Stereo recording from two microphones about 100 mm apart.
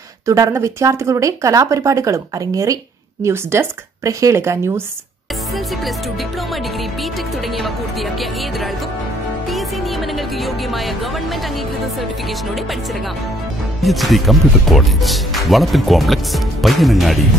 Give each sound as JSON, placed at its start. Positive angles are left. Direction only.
{"t": 0.3, "sound": "speech", "side_deg": -30}
{"t": 7.5, "sound": "speech", "side_deg": 0}
{"t": 9.5, "sound": "music", "side_deg": 0}
{"t": 13.8, "sound": "speech", "side_deg": 0}